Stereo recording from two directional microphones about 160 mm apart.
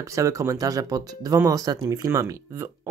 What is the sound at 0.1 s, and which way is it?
Speech, 20° right (ahead or behind).